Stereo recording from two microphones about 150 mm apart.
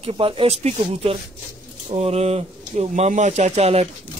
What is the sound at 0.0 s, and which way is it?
Speech, 35° right (ahead or behind).